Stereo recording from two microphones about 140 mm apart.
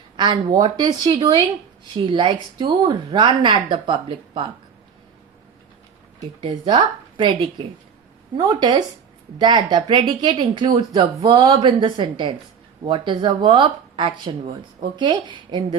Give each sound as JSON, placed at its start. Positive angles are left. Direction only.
{"t": 0.2, "sound": "speech", "side_deg": -30}
{"t": 6.4, "sound": "speech", "side_deg": -35}